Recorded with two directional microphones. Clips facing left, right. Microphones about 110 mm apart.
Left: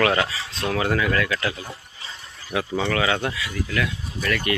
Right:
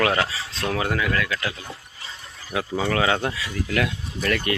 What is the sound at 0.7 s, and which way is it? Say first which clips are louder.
Speech: left 2 dB; 10° right (ahead or behind).